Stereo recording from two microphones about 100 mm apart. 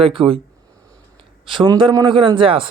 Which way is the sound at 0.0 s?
65° right (ahead or behind).